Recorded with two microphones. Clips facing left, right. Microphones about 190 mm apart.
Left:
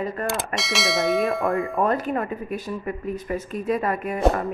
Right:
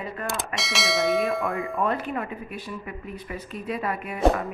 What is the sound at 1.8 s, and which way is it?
A woman's voice, 40° left (ahead or behind).